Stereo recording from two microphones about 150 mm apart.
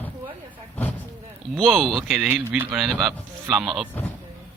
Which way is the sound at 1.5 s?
Centre (ahead or behind).